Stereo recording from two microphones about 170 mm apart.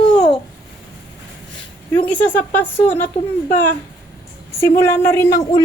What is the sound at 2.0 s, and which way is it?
A woman's voice, 10° left (ahead or behind).